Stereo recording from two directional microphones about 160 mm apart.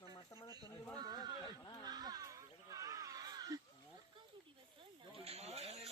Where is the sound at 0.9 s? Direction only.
25° right (ahead or behind).